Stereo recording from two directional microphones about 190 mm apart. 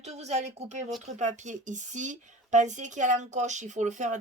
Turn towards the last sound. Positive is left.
turn(degrees=-40)  # may be behind; listen again after turning